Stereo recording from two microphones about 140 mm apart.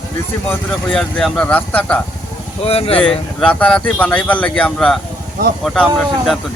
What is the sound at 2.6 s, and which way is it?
Speech, 45° left (ahead or behind).